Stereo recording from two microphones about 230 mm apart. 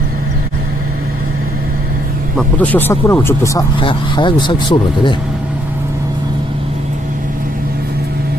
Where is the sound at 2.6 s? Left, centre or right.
Centre.